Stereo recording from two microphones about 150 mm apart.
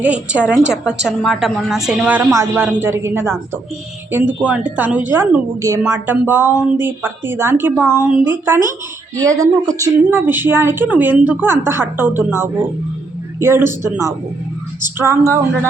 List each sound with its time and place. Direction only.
0.0 s a woman's voice: 10° right (ahead or behind)
9.1 s a woman's voice: 25° right (ahead or behind)